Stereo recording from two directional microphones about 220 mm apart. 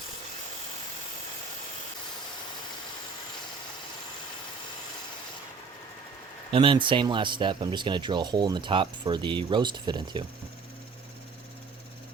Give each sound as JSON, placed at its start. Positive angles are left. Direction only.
{"t": 6.5, "sound": "speech", "side_deg": -20}